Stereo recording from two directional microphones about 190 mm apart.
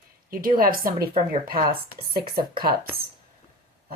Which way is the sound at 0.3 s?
50° right (ahead or behind).